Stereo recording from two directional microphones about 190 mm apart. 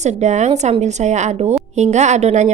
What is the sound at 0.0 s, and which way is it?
A woman's voice, 35° right (ahead or behind).